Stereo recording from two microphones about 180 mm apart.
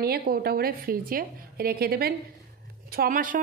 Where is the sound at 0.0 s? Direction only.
60° right (ahead or behind).